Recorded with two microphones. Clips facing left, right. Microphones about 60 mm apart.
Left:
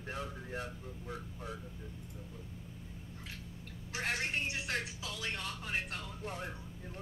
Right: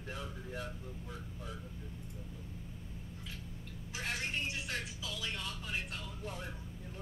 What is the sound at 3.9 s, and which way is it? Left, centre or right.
Music, left.